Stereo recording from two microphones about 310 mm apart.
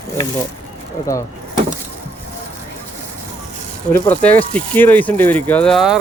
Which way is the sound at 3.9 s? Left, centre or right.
Centre.